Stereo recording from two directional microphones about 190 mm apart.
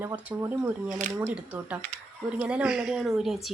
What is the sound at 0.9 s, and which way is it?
Speech, 40° right (ahead or behind).